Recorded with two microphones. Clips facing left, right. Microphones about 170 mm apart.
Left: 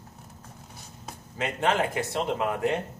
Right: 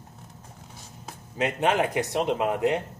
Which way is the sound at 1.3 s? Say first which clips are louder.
Right 2 dB; 15° right (ahead or behind).